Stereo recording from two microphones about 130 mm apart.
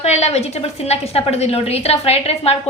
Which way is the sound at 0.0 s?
55° left (ahead or behind).